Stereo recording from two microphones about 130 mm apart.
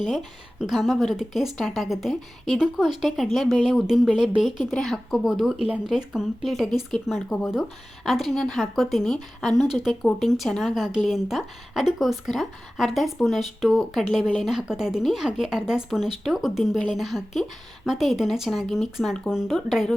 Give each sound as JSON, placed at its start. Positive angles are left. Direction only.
{"t": 0.0, "sound": "speech", "side_deg": 0}